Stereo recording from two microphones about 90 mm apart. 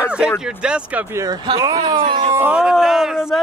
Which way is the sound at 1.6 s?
40° right (ahead or behind).